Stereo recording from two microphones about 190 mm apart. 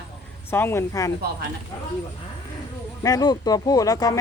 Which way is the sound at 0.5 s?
10° left (ahead or behind).